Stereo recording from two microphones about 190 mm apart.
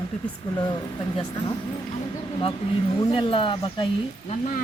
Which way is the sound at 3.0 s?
30° left (ahead or behind).